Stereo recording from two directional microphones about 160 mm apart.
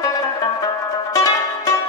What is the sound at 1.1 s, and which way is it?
Music, 20° left (ahead or behind).